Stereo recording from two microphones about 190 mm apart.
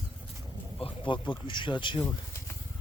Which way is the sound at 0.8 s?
25° left (ahead or behind).